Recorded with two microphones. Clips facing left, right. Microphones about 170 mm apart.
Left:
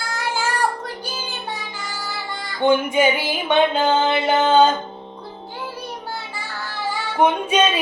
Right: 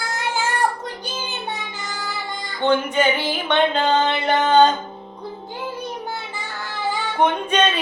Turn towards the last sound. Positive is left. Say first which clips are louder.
# left 1 dB
turn(degrees=10)  # may be behind; listen again after turning